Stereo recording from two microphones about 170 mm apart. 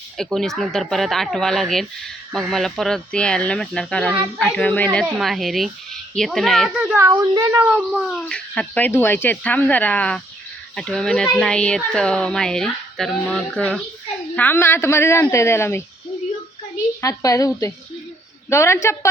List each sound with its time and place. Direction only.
0.2 s speech: centre (ahead or behind)
5.0 s speech: 5° right (ahead or behind)
7.2 s speech: 15° right (ahead or behind)
8.0 s speech: 5° left (ahead or behind)
17.0 s a woman's voice: 20° left (ahead or behind)
18.5 s speech: 15° left (ahead or behind)